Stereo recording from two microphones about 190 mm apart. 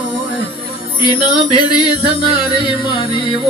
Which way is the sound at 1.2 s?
25° left (ahead or behind).